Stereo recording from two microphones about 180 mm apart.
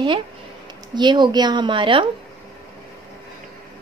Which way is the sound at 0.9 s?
25° right (ahead or behind).